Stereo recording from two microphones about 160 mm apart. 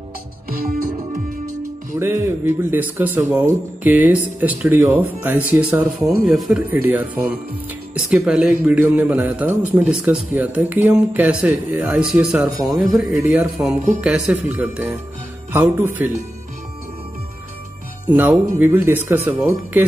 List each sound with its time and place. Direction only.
0.5 s music: 65° right (ahead or behind)
2.0 s speech: 15° right (ahead or behind)
18.6 s speech: 15° right (ahead or behind)